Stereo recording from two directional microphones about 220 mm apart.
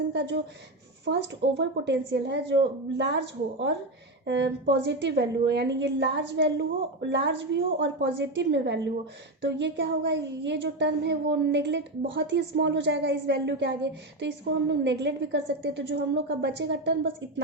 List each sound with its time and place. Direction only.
0.1 s speech: 50° right (ahead or behind)